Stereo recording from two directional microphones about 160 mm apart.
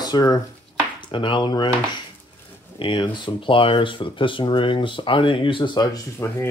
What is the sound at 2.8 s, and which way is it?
Speech, 30° left (ahead or behind).